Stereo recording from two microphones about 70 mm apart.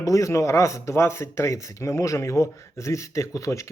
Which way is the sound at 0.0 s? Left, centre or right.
Left.